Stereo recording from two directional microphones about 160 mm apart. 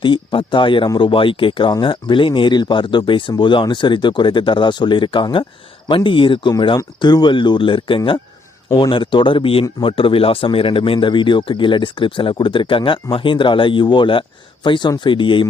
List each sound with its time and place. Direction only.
0.0 s speech: 30° left (ahead or behind)